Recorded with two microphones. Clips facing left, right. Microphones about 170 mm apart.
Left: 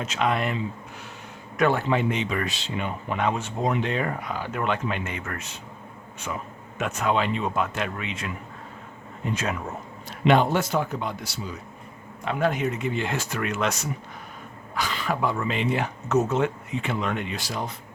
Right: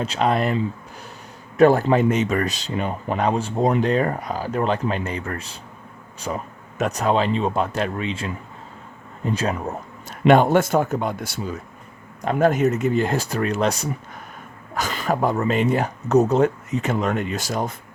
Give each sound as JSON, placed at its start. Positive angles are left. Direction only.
{"t": 0.0, "sound": "speech", "side_deg": -35}